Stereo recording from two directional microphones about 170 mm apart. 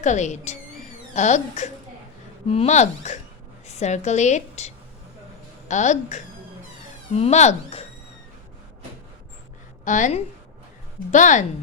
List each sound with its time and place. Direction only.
0.0 s a woman's voice: 45° left (ahead or behind)
9.8 s a woman's voice: 50° left (ahead or behind)